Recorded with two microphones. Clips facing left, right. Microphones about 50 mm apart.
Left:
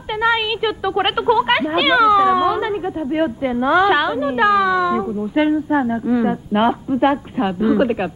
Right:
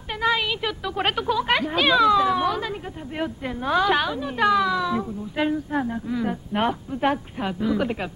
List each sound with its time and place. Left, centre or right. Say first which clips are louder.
0.2 s a woman's voice: left 5 dB; centre